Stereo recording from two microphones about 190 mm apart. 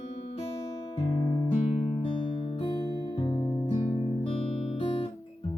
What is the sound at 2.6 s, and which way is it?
Music, 25° left (ahead or behind).